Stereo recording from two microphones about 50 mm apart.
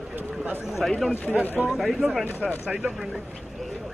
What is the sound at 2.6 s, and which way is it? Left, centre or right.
Speech, centre.